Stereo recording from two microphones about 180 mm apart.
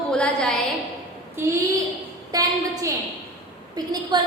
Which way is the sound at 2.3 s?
20° right (ahead or behind).